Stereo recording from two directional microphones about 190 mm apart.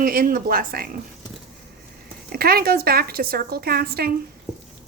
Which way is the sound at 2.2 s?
55° right (ahead or behind).